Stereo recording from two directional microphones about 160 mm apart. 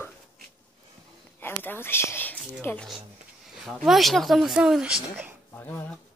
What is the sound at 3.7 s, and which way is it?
Speech, centre (ahead or behind).